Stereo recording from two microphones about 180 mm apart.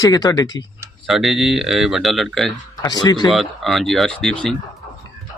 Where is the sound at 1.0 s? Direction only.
Centre (ahead or behind).